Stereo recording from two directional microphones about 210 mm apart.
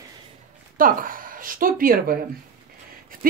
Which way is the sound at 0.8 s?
40° right (ahead or behind).